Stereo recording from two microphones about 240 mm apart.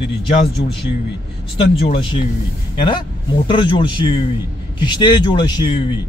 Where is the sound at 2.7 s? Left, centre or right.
Centre.